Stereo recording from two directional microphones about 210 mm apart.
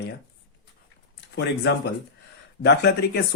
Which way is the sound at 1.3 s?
55° left (ahead or behind).